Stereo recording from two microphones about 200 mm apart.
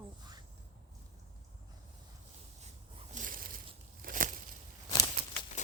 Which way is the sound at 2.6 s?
35° right (ahead or behind).